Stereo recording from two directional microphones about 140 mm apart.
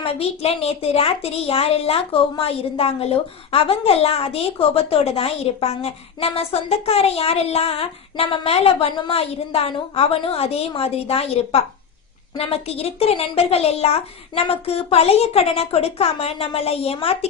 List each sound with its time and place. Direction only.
0.0 s a woman's voice: 45° left (ahead or behind)